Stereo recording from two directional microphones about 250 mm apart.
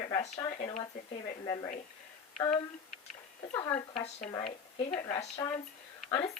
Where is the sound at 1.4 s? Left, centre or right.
Centre.